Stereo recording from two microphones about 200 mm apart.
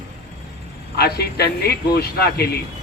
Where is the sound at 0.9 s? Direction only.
50° left (ahead or behind).